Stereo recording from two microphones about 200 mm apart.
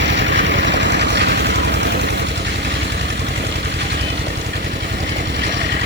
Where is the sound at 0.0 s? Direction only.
65° right (ahead or behind).